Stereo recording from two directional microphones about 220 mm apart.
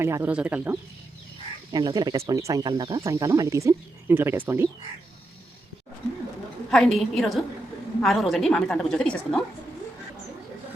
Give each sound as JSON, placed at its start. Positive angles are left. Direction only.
{"t": 0.0, "sound": "speech", "side_deg": -10}
{"t": 1.7, "sound": "speech", "side_deg": -20}
{"t": 6.7, "sound": "a woman's voice", "side_deg": 0}